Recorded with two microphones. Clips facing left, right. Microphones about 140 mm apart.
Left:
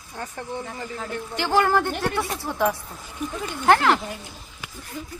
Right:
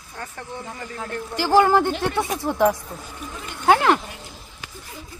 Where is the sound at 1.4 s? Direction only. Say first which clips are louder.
Right 4 dB; 10° right (ahead or behind).